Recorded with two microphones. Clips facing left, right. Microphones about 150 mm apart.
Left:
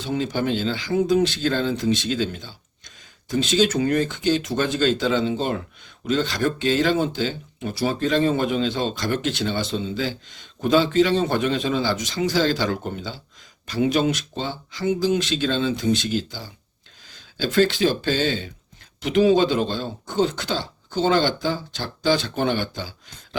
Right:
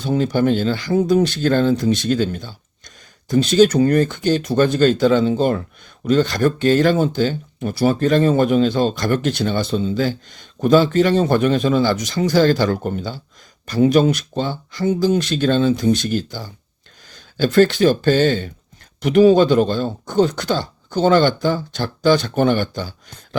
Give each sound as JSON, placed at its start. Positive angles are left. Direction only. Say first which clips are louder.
{"t": 0.0, "sound": "speech", "louder": "right 6 dB", "side_deg": -40}